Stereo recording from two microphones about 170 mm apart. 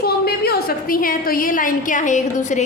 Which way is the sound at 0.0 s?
65° left (ahead or behind).